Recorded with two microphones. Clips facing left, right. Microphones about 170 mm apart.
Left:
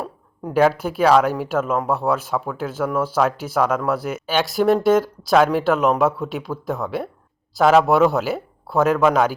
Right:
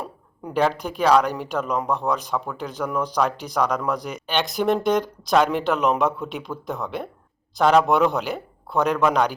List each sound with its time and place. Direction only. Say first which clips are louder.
0.0 s speech: left 4 dB; 5° left (ahead or behind)